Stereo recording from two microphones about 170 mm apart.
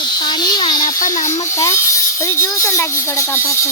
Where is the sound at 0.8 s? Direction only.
50° left (ahead or behind).